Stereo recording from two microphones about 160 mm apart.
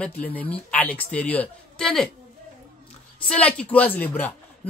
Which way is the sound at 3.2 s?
5° left (ahead or behind).